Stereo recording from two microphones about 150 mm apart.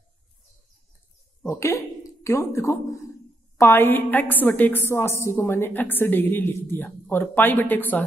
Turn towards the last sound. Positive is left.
turn(degrees=10)  # may be behind; listen again after turning